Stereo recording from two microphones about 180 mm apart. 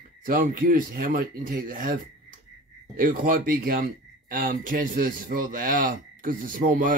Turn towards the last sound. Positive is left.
turn(degrees=-50)  # may be behind; listen again after turning